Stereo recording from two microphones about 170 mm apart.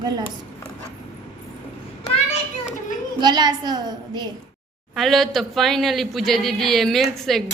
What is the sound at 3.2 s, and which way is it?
A woman's voice, 25° right (ahead or behind).